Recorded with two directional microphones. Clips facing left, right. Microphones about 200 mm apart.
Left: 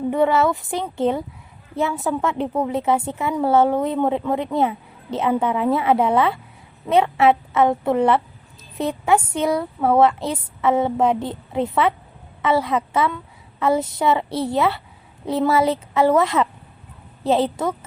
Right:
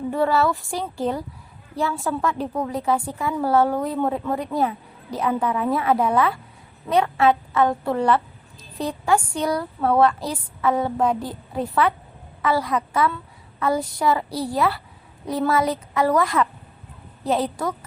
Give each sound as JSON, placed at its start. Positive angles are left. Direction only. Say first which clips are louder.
{"t": 0.1, "sound": "a woman's voice", "louder": "left 2 dB", "side_deg": 20}